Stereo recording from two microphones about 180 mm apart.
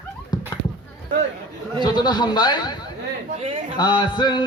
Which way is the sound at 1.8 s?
25° left (ahead or behind).